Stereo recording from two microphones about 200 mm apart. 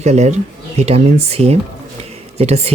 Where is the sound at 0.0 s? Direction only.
35° right (ahead or behind).